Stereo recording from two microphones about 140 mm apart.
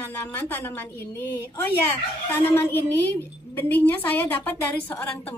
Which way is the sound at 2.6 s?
15° left (ahead or behind).